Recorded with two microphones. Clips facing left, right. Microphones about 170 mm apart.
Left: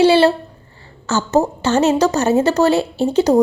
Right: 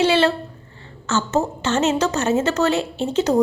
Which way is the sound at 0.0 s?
35° left (ahead or behind).